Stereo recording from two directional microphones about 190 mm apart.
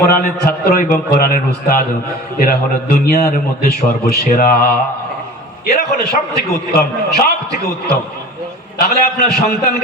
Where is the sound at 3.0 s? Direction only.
50° left (ahead or behind).